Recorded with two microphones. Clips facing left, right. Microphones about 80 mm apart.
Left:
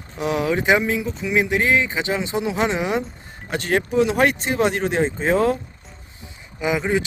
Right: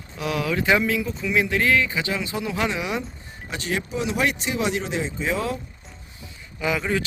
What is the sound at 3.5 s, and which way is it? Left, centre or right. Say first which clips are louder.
Speech: left 7 dB; left.